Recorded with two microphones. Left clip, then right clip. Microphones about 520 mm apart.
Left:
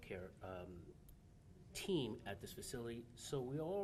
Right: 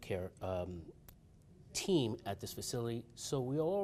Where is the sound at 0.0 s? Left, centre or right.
Right.